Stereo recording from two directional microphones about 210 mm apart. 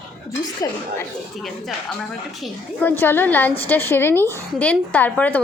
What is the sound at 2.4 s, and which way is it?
A woman's voice, 10° left (ahead or behind).